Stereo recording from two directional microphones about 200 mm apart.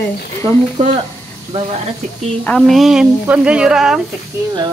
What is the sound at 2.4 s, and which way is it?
A woman's voice, 5° left (ahead or behind).